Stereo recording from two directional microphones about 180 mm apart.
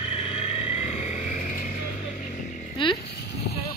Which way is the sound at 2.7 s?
30° left (ahead or behind).